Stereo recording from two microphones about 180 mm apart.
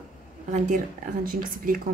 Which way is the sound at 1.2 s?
50° right (ahead or behind).